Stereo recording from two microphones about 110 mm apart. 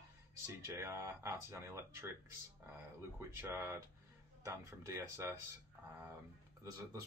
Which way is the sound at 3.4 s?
15° right (ahead or behind).